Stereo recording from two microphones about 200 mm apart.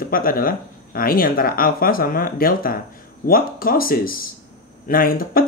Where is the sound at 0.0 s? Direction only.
45° left (ahead or behind).